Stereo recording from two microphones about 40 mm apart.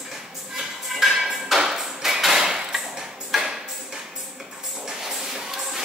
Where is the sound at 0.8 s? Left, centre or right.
Centre.